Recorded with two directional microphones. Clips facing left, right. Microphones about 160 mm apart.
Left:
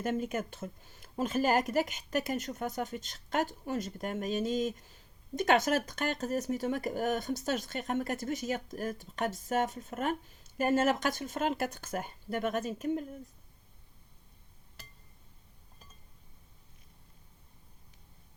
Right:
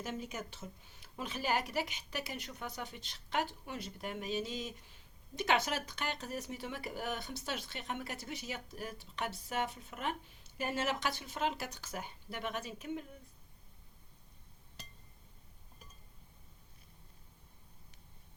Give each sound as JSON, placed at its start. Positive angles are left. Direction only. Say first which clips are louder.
{"t": 0.0, "sound": "speech", "louder": "left 9 dB", "side_deg": 55}